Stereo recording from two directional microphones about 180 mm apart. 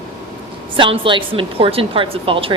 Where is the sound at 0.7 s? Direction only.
30° right (ahead or behind).